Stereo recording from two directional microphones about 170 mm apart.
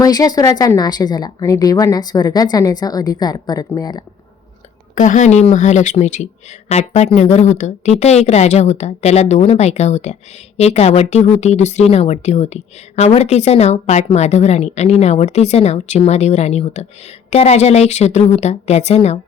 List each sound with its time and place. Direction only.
0.0 s a woman's voice: 20° left (ahead or behind)
4.9 s a woman's voice: 45° left (ahead or behind)